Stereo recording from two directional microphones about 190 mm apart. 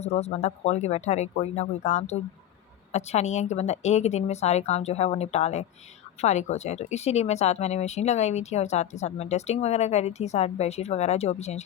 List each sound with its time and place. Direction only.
0.0 s speech: 35° left (ahead or behind)